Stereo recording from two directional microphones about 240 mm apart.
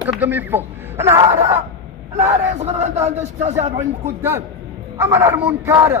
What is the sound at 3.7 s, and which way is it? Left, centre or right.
A man's voice, centre.